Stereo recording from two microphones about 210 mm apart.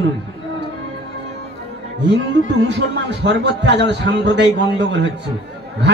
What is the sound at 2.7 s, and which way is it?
A man's voice, 55° right (ahead or behind).